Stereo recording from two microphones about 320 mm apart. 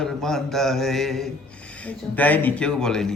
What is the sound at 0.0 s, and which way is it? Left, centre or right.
A man's voice, centre.